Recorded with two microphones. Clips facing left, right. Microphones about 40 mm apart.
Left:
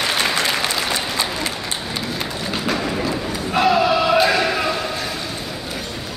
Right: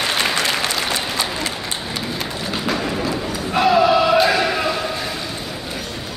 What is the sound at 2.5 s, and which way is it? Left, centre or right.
Music, centre.